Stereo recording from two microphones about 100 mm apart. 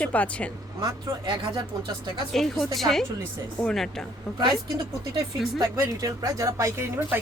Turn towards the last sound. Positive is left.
turn(degrees=-20)  # may be behind; listen again after turning